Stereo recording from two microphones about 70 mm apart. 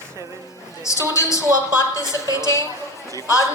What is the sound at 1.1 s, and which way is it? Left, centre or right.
Speech, left.